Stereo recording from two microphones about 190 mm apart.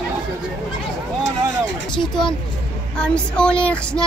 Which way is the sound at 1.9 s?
Centre (ahead or behind).